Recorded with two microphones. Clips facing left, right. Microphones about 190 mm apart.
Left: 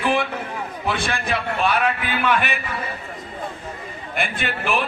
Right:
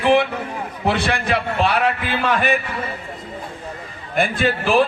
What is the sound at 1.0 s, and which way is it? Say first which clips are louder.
Speech: right 4 dB; 70° right (ahead or behind).